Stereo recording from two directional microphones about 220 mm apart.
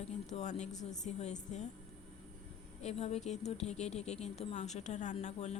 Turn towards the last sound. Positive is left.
turn(degrees=30)  # may be behind; listen again after turning